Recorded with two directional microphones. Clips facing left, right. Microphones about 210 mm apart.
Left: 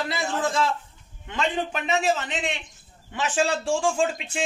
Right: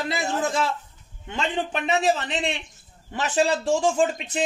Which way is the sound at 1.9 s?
35° right (ahead or behind).